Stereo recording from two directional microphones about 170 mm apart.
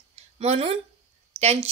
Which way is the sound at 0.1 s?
35° right (ahead or behind).